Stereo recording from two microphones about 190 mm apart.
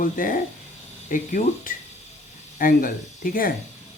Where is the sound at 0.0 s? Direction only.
45° left (ahead or behind).